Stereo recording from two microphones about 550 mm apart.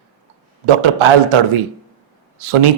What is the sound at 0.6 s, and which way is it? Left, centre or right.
A man's voice, right.